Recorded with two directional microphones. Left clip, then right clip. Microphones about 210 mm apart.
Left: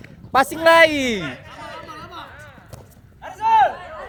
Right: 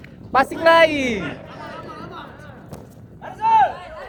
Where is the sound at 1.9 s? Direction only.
55° left (ahead or behind).